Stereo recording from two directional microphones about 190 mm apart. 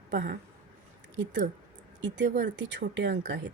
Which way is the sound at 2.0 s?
70° right (ahead or behind).